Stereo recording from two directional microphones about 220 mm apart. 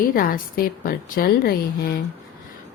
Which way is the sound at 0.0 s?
40° left (ahead or behind).